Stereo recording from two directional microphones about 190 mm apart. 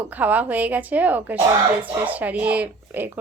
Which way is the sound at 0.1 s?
10° right (ahead or behind).